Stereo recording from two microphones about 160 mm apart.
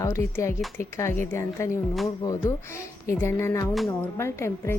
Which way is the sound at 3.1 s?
15° left (ahead or behind).